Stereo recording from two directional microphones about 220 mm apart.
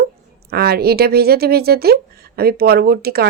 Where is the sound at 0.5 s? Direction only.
45° right (ahead or behind).